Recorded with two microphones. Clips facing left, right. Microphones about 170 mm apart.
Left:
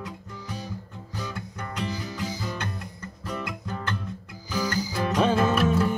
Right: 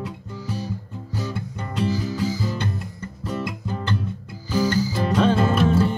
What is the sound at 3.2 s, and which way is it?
Music, 30° right (ahead or behind).